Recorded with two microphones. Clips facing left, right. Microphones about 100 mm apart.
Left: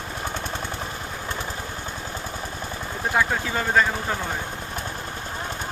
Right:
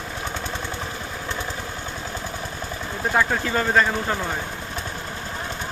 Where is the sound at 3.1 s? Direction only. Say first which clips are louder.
Right 2 dB; centre (ahead or behind).